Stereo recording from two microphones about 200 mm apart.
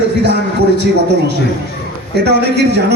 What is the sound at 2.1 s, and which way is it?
Music, 55° right (ahead or behind).